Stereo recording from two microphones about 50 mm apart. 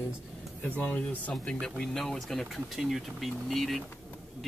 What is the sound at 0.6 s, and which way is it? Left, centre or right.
Speech, left.